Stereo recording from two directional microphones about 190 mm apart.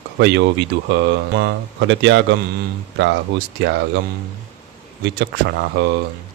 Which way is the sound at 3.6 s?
65° right (ahead or behind).